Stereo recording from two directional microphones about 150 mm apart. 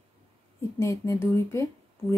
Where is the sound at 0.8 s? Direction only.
20° left (ahead or behind).